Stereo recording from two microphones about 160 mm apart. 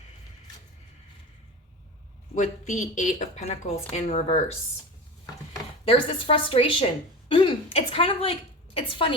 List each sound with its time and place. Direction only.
2.3 s a woman's voice: 50° left (ahead or behind)
5.8 s a woman's voice: 35° left (ahead or behind)